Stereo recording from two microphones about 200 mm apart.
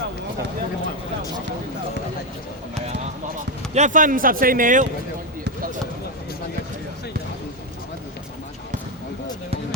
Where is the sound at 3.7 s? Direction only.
35° right (ahead or behind).